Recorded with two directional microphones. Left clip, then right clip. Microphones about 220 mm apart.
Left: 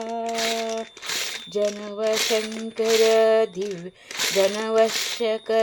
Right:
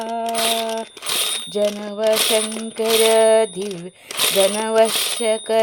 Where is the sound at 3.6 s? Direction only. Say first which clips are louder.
Right 2 dB; 35° right (ahead or behind).